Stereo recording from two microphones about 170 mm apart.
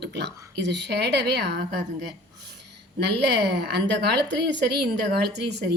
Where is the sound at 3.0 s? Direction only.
85° right.